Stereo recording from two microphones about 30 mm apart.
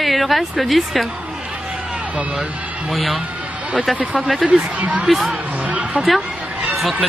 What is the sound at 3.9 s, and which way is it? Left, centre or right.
Speech, right.